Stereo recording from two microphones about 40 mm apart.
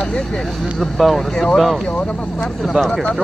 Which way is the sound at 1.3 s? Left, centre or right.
Centre.